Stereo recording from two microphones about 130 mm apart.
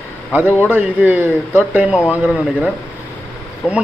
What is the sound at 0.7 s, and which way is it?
Speech, 15° right (ahead or behind).